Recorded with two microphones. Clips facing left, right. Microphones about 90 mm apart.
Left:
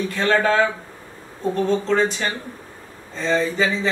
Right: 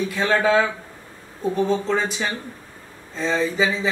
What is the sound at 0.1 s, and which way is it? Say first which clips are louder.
Speech: even; 5° right (ahead or behind).